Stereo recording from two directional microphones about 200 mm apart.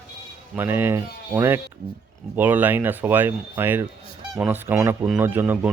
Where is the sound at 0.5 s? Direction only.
10° right (ahead or behind).